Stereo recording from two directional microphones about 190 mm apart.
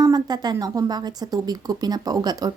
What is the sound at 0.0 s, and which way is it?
A woman's voice, 20° right (ahead or behind).